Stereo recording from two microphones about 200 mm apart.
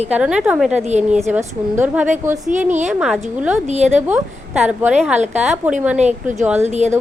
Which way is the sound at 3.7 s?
35° right (ahead or behind).